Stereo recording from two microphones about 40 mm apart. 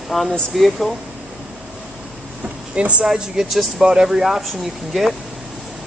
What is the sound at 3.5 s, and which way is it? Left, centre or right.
Speech, centre.